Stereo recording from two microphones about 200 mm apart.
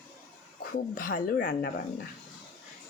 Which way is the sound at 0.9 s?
45° left (ahead or behind).